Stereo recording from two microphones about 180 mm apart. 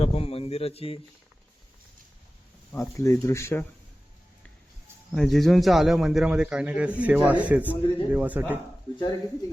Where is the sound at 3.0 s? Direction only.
15° left (ahead or behind).